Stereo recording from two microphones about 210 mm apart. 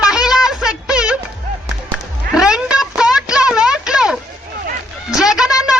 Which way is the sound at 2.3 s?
5° right (ahead or behind).